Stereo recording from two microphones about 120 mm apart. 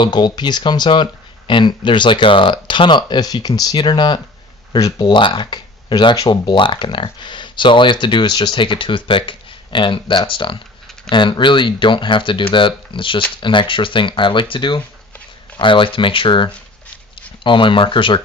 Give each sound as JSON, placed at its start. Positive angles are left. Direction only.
{"t": 0.0, "sound": "speech", "side_deg": 35}